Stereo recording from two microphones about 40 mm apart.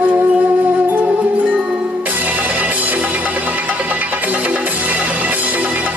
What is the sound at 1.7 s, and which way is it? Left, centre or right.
Music, right.